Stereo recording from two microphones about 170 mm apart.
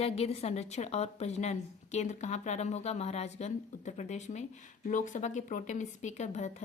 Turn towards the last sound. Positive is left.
turn(degrees=45)  # may be behind; listen again after turning